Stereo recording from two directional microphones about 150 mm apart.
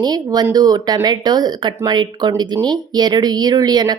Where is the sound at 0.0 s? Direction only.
25° right (ahead or behind).